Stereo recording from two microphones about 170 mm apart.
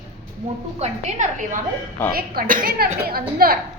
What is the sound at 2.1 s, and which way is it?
A woman's voice, 60° right (ahead or behind).